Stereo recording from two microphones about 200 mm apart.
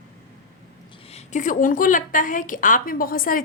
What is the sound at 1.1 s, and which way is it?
A woman's voice, 40° left (ahead or behind).